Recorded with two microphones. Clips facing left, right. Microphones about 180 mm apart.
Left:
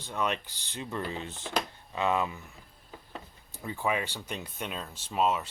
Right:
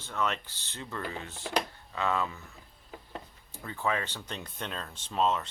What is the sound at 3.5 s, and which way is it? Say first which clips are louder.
Speech: left 1 dB; 15° left (ahead or behind).